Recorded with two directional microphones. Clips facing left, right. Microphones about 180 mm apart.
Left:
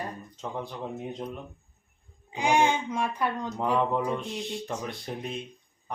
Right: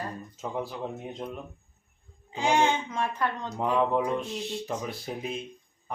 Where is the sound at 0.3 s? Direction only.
5° right (ahead or behind).